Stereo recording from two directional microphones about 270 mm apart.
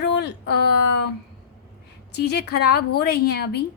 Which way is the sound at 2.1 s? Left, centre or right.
Left.